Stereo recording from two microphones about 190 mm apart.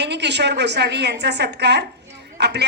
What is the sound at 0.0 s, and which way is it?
A woman's voice, 65° right (ahead or behind).